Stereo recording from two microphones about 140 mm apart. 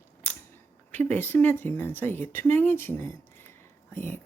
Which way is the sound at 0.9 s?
15° left (ahead or behind).